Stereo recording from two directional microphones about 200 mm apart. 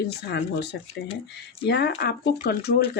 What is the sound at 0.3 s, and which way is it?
Speech, 55° left (ahead or behind).